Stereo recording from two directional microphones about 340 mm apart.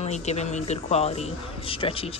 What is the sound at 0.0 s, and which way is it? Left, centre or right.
A man's voice, centre.